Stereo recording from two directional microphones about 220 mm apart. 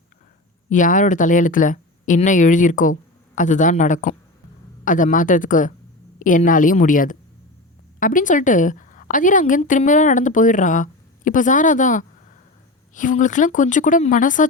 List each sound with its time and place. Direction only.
0.7 s a woman's voice: 35° left (ahead or behind)